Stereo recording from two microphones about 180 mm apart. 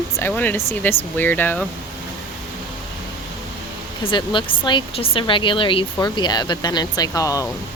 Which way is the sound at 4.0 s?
25° left (ahead or behind).